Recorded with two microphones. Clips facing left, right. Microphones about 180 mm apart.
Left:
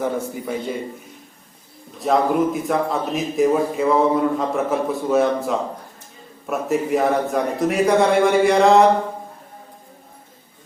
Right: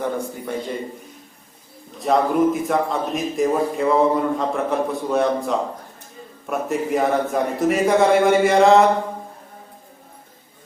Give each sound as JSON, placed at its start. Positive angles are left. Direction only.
{"t": 0.0, "sound": "a man's voice", "side_deg": 0}
{"t": 2.0, "sound": "a man's voice", "side_deg": 0}